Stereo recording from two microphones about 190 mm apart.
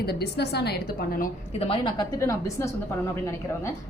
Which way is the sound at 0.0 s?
55° left (ahead or behind).